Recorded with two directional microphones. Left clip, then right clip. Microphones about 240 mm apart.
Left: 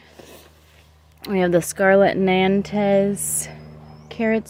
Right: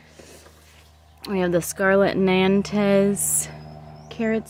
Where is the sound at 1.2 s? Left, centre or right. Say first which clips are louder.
Left 4 dB; centre.